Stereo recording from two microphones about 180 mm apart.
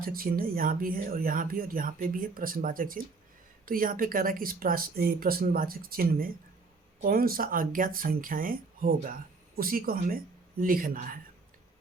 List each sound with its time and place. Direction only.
0.0 s speech: 55° right (ahead or behind)